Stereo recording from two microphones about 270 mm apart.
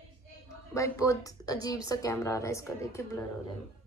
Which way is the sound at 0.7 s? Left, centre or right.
Centre.